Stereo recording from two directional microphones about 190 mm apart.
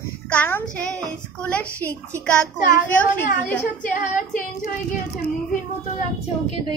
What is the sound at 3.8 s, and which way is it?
Female singing, 45° left (ahead or behind).